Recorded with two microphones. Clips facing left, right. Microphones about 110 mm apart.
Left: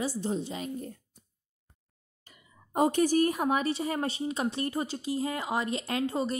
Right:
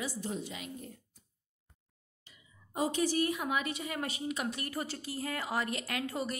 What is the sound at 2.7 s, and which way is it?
A woman's voice, 55° left (ahead or behind).